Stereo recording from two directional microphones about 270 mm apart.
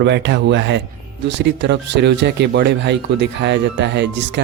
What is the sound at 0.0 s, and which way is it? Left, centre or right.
Speech, right.